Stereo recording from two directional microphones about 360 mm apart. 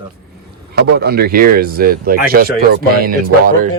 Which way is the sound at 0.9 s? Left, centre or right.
Right.